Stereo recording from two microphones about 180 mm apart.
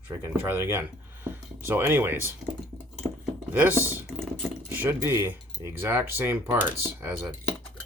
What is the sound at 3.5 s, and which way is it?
Speech, 10° right (ahead or behind).